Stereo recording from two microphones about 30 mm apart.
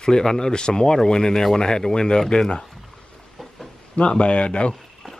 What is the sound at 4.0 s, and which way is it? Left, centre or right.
Speech, left.